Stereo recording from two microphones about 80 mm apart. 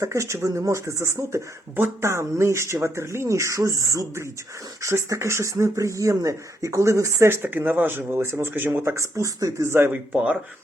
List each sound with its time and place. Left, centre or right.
0.0 s speech: right
7.4 s speech: right
9.6 s speech: right